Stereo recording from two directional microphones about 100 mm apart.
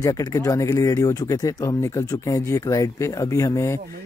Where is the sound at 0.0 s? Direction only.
35° left (ahead or behind).